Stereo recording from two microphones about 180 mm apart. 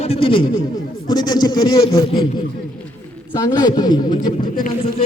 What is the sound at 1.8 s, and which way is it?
Speech, 30° left (ahead or behind).